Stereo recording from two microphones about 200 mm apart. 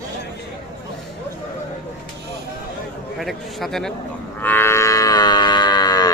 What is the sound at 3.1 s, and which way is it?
Speech, centre (ahead or behind).